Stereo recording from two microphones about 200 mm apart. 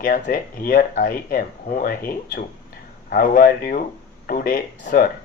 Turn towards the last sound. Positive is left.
turn(degrees=45)  # may be behind; listen again after turning